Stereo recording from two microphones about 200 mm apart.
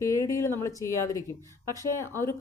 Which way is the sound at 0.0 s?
15° left (ahead or behind).